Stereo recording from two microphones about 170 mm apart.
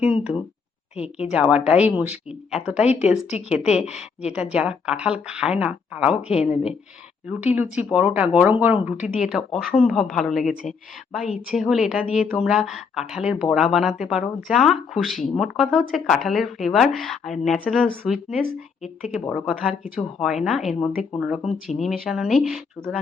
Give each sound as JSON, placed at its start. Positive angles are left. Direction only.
{"t": 0.0, "sound": "speech", "side_deg": -5}
{"t": 0.9, "sound": "speech", "side_deg": 35}
{"t": 1.3, "sound": "speech", "side_deg": -5}
{"t": 2.8, "sound": "speech", "side_deg": 40}
{"t": 4.3, "sound": "a woman's voice", "side_deg": -5}
{"t": 21.2, "sound": "a woman's voice", "side_deg": -5}